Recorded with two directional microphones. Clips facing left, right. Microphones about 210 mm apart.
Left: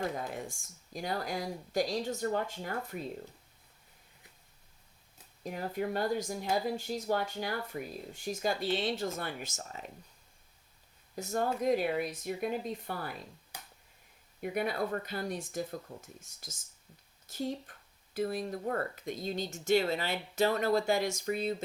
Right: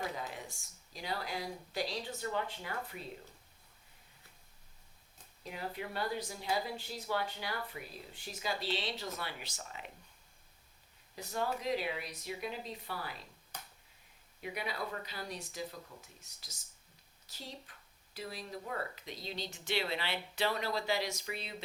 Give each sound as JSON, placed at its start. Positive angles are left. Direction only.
{"t": 0.2, "sound": "speech", "side_deg": 50}
{"t": 5.4, "sound": "speech", "side_deg": 45}
{"t": 11.1, "sound": "speech", "side_deg": 45}
{"t": 13.5, "sound": "finger snapping", "side_deg": 10}
{"t": 14.4, "sound": "speech", "side_deg": 50}